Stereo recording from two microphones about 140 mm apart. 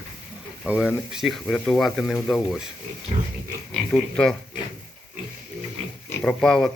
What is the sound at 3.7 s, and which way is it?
Speech, centre (ahead or behind).